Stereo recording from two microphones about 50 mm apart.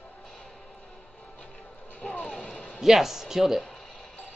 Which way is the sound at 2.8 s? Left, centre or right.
Centre.